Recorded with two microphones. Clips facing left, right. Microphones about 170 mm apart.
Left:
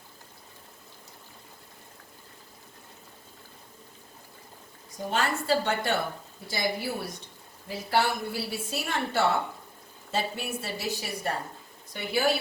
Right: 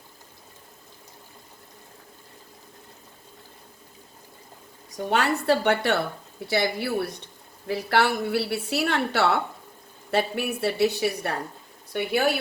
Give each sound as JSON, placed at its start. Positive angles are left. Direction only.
{"t": 5.1, "sound": "a woman's voice", "side_deg": -70}